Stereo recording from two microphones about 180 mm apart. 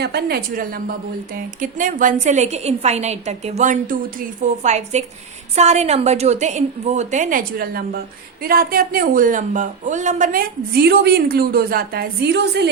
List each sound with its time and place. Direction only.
0.0 s a woman's voice: 65° right (ahead or behind)